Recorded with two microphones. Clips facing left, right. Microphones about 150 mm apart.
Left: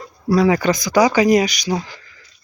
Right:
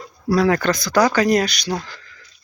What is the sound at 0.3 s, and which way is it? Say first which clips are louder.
Speech: left 2 dB; 10° left (ahead or behind).